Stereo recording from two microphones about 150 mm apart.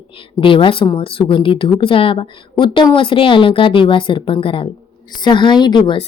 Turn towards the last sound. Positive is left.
turn(degrees=35)  # may be behind; listen again after turning